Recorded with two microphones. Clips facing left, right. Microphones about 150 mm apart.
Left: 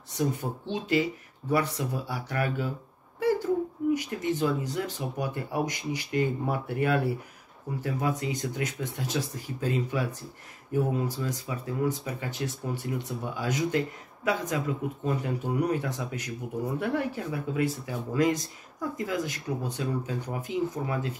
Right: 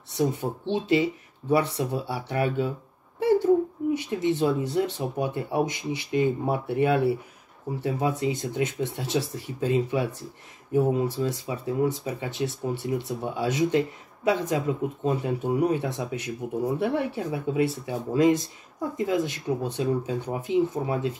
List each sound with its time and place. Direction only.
0.2 s speech: 25° right (ahead or behind)
3.9 s speech: 25° right (ahead or behind)